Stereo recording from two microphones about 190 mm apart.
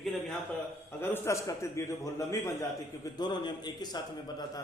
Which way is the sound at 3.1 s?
25° left (ahead or behind).